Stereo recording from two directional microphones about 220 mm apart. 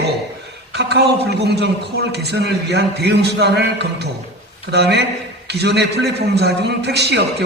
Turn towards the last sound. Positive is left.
turn(degrees=-50)  # may be behind; listen again after turning